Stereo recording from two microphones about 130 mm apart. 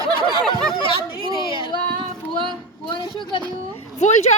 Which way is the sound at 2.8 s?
35° left (ahead or behind).